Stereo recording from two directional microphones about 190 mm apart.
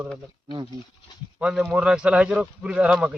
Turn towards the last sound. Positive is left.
turn(degrees=-5)  # may be behind; listen again after turning